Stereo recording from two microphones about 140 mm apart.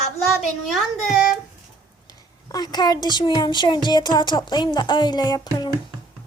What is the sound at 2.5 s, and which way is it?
A child's voice, 30° left (ahead or behind).